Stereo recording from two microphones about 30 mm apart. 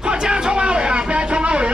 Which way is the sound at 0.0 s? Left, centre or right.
Right.